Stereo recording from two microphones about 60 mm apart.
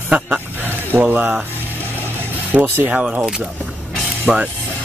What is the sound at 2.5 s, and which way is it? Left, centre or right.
Speech, right.